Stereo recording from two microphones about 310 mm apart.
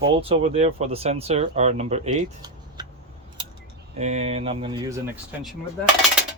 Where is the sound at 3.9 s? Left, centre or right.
Right; by 5.9 s centre.